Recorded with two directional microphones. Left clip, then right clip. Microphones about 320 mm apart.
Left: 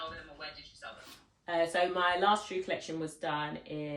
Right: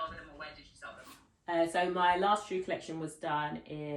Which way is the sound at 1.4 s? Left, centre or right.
Centre.